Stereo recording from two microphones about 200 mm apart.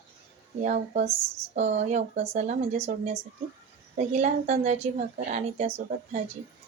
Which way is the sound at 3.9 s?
35° right (ahead or behind).